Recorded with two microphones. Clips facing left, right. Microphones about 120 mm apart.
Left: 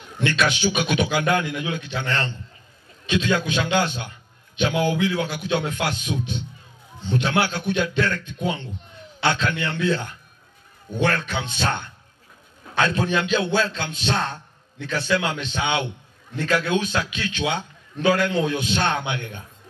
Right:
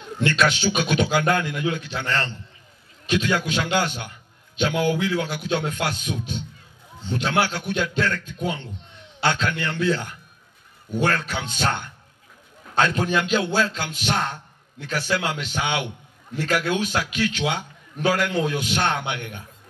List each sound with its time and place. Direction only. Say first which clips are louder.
0.3 s a man's voice: right 1 dB; 15° left (ahead or behind)